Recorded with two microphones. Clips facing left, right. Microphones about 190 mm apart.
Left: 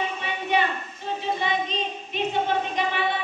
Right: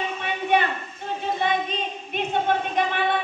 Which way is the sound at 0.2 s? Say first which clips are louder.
Right 4 dB; 55° right (ahead or behind).